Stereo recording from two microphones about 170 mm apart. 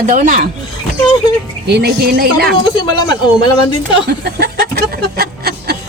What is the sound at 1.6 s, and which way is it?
Speech, 70° right (ahead or behind).